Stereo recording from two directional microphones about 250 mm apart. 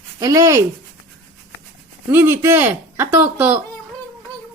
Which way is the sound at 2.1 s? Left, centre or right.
Centre.